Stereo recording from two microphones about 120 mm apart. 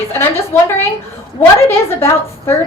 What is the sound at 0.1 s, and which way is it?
A woman's voice, 20° left (ahead or behind).